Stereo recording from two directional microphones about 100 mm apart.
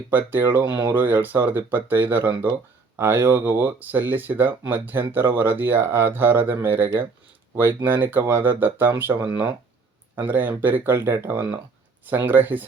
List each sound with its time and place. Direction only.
0.1 s speech: 20° right (ahead or behind)